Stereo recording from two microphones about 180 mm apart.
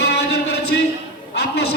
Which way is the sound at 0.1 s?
65° left (ahead or behind).